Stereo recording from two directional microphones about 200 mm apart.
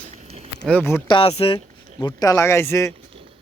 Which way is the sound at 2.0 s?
20° left (ahead or behind).